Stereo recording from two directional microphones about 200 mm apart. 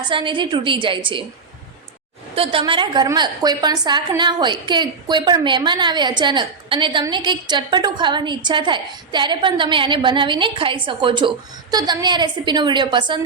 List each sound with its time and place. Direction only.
0.1 s a woman's voice: 25° right (ahead or behind)
2.3 s a woman's voice: 25° right (ahead or behind)